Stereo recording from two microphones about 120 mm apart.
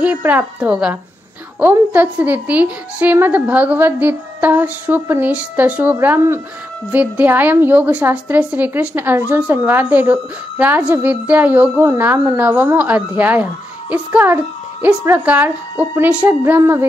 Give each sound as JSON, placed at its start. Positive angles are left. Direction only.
{"t": 0.0, "sound": "a woman's voice", "side_deg": -10}